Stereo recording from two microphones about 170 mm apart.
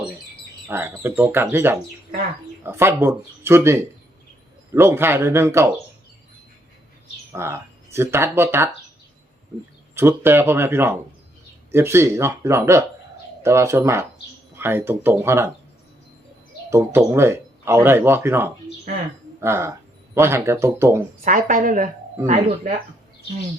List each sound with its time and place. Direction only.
0.7 s speech: 15° right (ahead or behind)
7.3 s speech: 15° right (ahead or behind)
9.9 s speech: 15° right (ahead or behind)
16.6 s speech: 15° right (ahead or behind)
21.2 s a woman's voice: 50° right (ahead or behind)
22.2 s speech: 15° right (ahead or behind)